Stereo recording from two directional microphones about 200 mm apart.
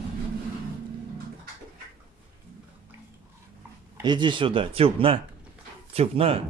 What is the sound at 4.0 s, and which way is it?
Speech, 25° right (ahead or behind).